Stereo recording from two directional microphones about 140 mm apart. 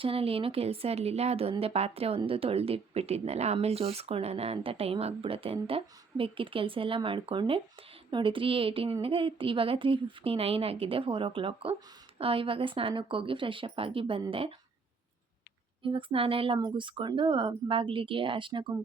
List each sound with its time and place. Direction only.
0.0 s a woman's voice: 45° right (ahead or behind)
15.8 s a woman's voice: 40° right (ahead or behind)